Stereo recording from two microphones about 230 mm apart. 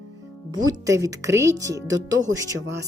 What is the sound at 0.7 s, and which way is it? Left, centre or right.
Speech, centre.